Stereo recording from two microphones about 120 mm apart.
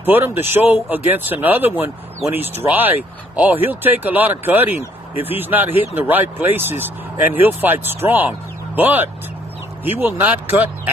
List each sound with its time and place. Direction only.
0.0 s speech: 15° right (ahead or behind)